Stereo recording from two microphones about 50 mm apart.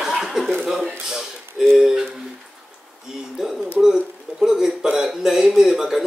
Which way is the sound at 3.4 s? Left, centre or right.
Centre.